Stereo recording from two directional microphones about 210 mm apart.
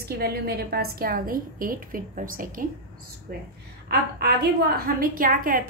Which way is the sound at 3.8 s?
45° right (ahead or behind).